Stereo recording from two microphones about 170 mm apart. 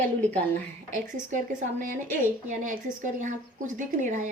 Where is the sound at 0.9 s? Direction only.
50° right (ahead or behind).